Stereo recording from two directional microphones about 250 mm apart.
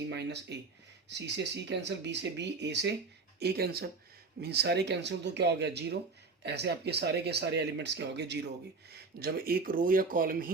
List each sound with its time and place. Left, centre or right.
0.1 s speech: right